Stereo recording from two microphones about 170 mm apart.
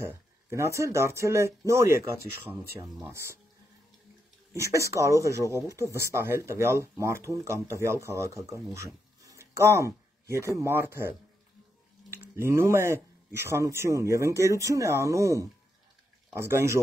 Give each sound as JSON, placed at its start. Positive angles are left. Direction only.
{"t": 0.0, "sound": "speech", "side_deg": -15}
{"t": 4.6, "sound": "speech", "side_deg": -15}